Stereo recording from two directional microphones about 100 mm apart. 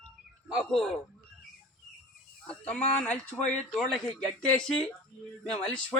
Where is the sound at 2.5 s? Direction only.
15° left (ahead or behind).